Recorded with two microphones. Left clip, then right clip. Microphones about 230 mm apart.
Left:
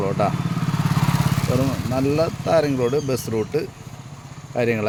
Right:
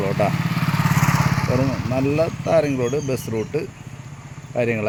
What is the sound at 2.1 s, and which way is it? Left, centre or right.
Speech, centre.